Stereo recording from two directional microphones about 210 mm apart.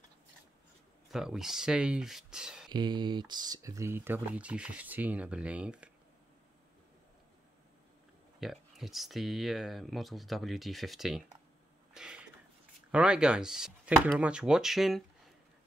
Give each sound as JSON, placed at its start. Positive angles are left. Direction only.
{"t": 1.1, "sound": "speech", "side_deg": 0}
{"t": 2.7, "sound": "speech", "side_deg": -20}
{"t": 8.4, "sound": "speech", "side_deg": 0}
{"t": 11.9, "sound": "a sound", "side_deg": -5}
{"t": 12.9, "sound": "speech", "side_deg": -5}